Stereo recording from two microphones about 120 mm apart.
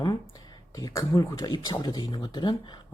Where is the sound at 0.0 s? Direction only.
35° left (ahead or behind).